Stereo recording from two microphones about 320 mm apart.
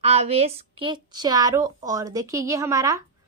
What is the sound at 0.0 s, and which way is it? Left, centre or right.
Speech, centre.